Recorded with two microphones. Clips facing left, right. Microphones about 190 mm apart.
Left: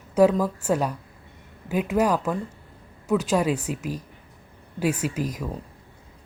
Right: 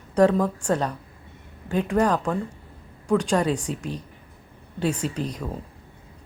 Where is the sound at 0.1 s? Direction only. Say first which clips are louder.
Even; 5° left (ahead or behind).